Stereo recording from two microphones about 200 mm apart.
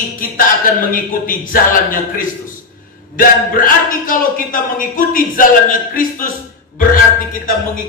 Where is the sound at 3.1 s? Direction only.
45° left (ahead or behind).